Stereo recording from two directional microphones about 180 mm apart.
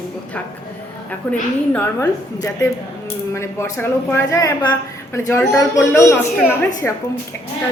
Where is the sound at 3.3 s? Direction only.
15° left (ahead or behind).